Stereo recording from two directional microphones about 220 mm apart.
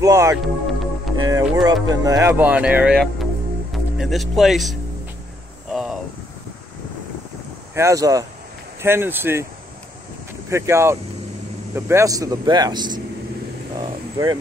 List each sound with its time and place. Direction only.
0.0 s speech: 15° right (ahead or behind)
5.7 s a sound: centre (ahead or behind)
7.7 s speech: 15° right (ahead or behind)
10.5 s speech: 10° right (ahead or behind)
13.7 s vehicle: 20° right (ahead or behind)